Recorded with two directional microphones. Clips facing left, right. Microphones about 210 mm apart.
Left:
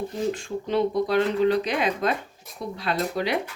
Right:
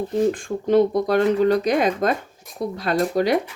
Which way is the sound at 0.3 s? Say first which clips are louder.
Right 6 dB; 50° right (ahead or behind).